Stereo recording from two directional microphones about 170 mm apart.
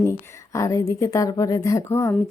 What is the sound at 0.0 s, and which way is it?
A woman's voice, 15° left (ahead or behind).